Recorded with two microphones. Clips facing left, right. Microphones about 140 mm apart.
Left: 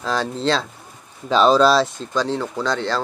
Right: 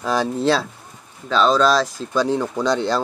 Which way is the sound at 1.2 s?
10° left (ahead or behind).